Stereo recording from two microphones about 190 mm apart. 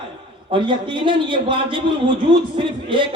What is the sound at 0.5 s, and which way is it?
A man's voice, 25° right (ahead or behind).